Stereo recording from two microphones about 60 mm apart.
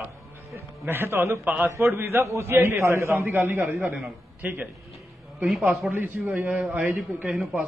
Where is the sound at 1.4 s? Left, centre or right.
Right.